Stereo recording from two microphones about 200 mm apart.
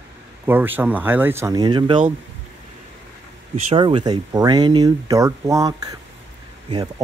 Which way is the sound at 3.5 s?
30° right (ahead or behind).